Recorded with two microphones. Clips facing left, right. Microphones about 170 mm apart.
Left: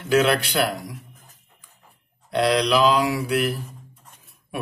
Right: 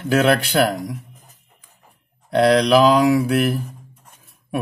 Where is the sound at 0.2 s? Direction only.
50° right (ahead or behind).